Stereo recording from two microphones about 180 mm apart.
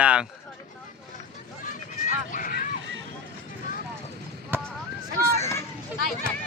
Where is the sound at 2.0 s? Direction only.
50° left (ahead or behind).